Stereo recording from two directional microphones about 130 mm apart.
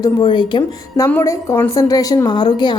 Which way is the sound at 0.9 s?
25° left (ahead or behind).